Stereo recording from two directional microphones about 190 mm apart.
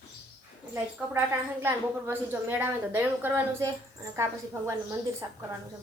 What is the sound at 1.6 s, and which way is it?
A woman's voice, 10° right (ahead or behind).